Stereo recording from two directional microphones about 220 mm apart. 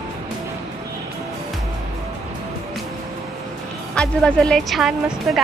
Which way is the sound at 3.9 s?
5° left (ahead or behind).